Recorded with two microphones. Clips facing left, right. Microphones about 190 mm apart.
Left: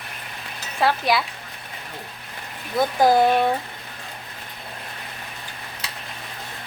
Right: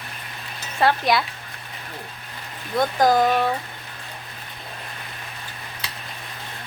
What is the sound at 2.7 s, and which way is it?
Speech, 10° left (ahead or behind).